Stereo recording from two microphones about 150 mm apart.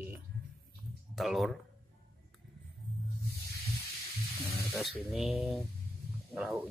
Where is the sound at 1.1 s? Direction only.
Centre (ahead or behind).